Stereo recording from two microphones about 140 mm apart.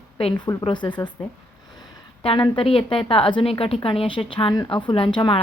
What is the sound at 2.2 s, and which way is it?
A woman's voice, 40° left (ahead or behind).